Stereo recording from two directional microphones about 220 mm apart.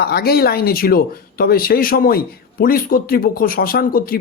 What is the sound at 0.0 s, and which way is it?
Speech, 45° left (ahead or behind).